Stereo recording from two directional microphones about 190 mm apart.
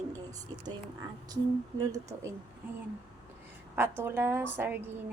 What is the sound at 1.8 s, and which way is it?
Speech, 15° right (ahead or behind).